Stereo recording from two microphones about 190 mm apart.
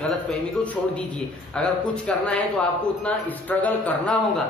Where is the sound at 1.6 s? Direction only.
5° left (ahead or behind).